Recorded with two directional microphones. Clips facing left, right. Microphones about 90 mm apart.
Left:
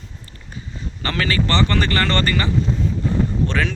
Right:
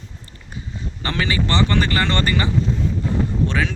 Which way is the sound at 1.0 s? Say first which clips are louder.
Left 1 dB; 15° right (ahead or behind).